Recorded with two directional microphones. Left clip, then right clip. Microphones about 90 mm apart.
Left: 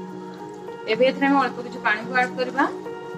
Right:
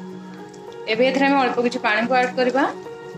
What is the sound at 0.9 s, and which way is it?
A woman's voice, 50° right (ahead or behind).